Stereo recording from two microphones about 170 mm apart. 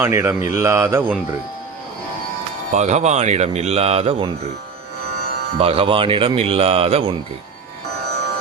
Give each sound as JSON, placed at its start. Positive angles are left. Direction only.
{"t": 0.0, "sound": "speech", "side_deg": -15}
{"t": 2.7, "sound": "speech", "side_deg": -40}
{"t": 5.5, "sound": "speech", "side_deg": -35}